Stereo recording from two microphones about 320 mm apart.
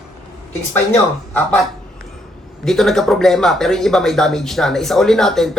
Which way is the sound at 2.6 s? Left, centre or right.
Centre.